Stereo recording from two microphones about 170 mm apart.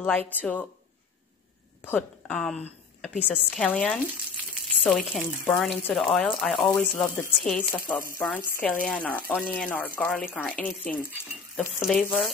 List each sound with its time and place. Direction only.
0.0 s speech: 10° left (ahead or behind)
1.9 s a woman's voice: 5° left (ahead or behind)